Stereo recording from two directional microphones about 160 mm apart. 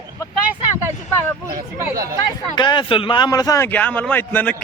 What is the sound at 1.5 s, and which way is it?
Speech, 20° right (ahead or behind).